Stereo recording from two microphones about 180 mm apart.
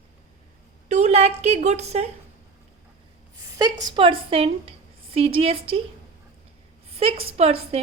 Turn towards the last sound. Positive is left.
turn(degrees=-35)  # may be behind; listen again after turning